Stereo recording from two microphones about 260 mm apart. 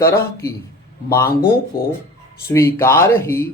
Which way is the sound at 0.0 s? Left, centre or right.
Centre.